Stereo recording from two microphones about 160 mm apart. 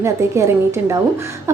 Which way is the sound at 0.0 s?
15° right (ahead or behind).